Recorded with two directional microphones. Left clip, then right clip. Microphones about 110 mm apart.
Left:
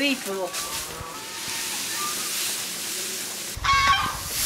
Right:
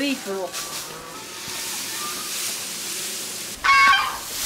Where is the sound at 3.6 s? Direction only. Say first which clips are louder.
Right 5 dB; 30° right (ahead or behind).